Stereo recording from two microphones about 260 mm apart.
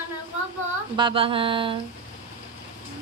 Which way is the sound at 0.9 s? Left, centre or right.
Centre.